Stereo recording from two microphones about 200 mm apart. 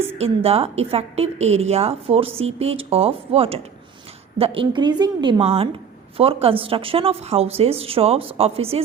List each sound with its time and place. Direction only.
0.2 s a woman's voice: 30° right (ahead or behind)